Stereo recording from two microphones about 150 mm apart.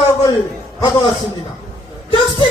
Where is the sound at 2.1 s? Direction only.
35° left (ahead or behind).